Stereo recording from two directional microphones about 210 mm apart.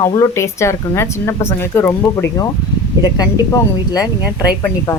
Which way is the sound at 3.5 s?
15° left (ahead or behind).